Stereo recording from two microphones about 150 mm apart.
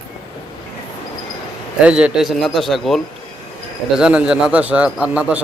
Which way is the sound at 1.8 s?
5° right (ahead or behind).